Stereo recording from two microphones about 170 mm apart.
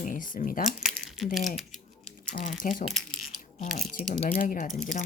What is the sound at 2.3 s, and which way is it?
Speech, 70° left (ahead or behind).